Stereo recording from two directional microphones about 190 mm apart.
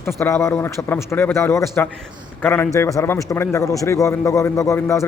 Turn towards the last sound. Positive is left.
turn(degrees=15)  # may be behind; listen again after turning